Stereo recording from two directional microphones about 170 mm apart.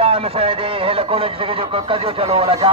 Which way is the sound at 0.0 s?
35° right (ahead or behind).